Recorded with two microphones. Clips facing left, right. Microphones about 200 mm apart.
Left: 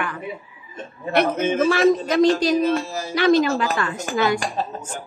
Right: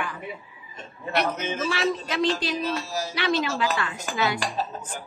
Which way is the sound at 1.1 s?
50° left (ahead or behind).